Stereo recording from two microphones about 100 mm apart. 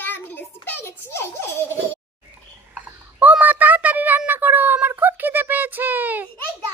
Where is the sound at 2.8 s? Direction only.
15° right (ahead or behind).